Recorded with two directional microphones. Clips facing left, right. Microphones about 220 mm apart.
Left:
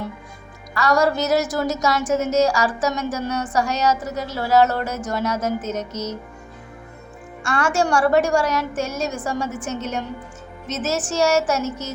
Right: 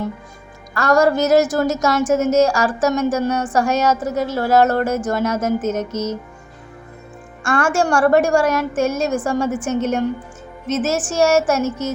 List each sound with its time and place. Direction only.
0.7 s a woman's voice: 50° right (ahead or behind)
7.4 s a woman's voice: 50° right (ahead or behind)